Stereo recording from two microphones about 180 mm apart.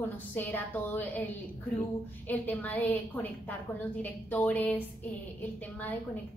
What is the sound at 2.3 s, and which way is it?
A woman's voice, 10° left (ahead or behind).